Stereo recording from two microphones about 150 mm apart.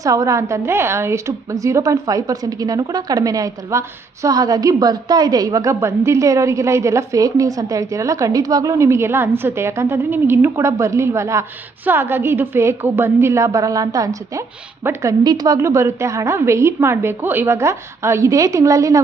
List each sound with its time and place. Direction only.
0.0 s a woman's voice: 20° right (ahead or behind)